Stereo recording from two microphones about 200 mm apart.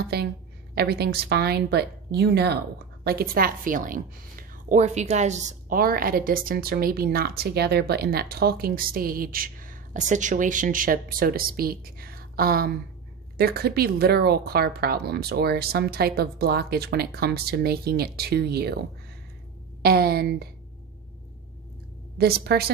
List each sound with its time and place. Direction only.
0.1 s speech: 55° right (ahead or behind)
22.2 s speech: 50° right (ahead or behind)